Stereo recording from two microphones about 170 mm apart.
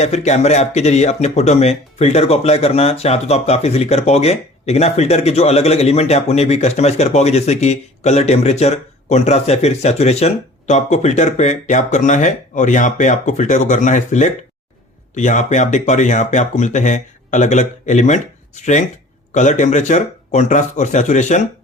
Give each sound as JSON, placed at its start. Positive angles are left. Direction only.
{"t": 0.0, "sound": "speech", "side_deg": 40}